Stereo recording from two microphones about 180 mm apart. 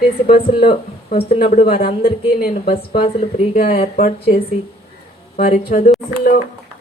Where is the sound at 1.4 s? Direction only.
35° left (ahead or behind).